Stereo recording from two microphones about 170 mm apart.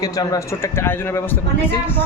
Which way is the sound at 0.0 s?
20° left (ahead or behind).